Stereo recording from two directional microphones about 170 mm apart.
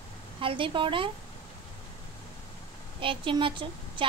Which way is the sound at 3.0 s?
30° right (ahead or behind).